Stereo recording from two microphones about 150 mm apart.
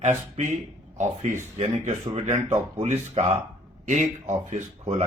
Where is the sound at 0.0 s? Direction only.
55° right (ahead or behind).